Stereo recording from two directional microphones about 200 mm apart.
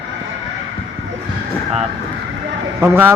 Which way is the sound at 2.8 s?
10° right (ahead or behind).